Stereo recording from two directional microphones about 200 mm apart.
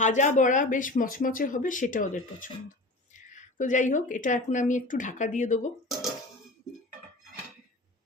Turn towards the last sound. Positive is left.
turn(degrees=0)  # may be behind; listen again after turning